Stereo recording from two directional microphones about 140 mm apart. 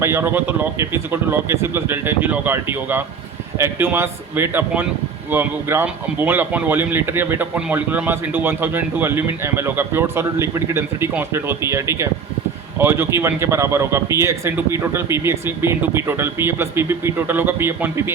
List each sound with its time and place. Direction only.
0.0 s speech: 20° right (ahead or behind)